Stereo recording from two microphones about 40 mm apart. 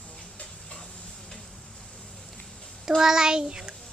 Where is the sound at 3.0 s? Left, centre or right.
Centre.